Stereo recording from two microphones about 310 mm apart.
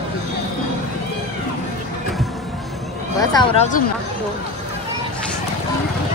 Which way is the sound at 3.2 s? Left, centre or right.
Centre.